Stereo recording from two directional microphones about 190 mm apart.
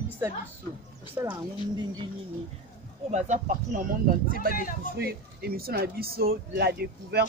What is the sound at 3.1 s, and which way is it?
Speech, 40° right (ahead or behind).